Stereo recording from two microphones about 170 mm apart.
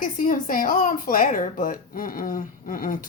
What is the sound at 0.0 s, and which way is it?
Speech, 55° left (ahead or behind).